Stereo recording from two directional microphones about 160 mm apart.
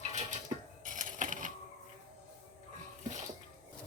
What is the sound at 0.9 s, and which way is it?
Cash register, 55° right (ahead or behind).